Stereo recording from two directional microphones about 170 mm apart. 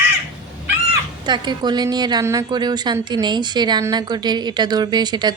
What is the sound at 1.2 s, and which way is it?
A woman's voice, 25° right (ahead or behind).